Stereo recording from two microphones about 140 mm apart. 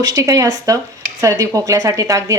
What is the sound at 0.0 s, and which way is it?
Speech, 25° right (ahead or behind).